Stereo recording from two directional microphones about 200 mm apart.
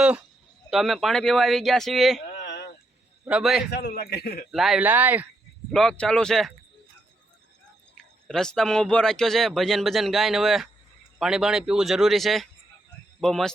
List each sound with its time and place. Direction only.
0.7 s speech: centre (ahead or behind)
3.2 s speech: 5° right (ahead or behind)
3.7 s a man's voice: 55° left (ahead or behind)
4.5 s speech: centre (ahead or behind)
5.7 s speech: 5° left (ahead or behind)
7.9 s speech: centre (ahead or behind)